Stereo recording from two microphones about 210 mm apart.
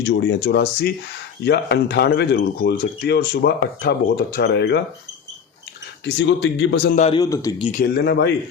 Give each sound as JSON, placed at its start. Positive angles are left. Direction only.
{"t": 0.0, "sound": "speech", "side_deg": 55}
{"t": 6.1, "sound": "speech", "side_deg": 55}
{"t": 7.2, "sound": "a man's voice", "side_deg": 15}
{"t": 7.7, "sound": "speech", "side_deg": 40}
{"t": 8.0, "sound": "speech", "side_deg": 55}